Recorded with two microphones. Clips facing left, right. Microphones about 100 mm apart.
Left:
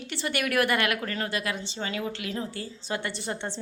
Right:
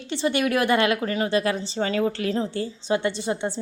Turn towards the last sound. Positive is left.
turn(degrees=-15)  # may be behind; listen again after turning